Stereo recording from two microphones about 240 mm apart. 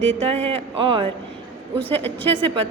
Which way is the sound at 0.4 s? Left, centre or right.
Right.